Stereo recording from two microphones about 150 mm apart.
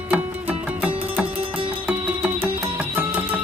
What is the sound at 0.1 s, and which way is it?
Music, 10° right (ahead or behind).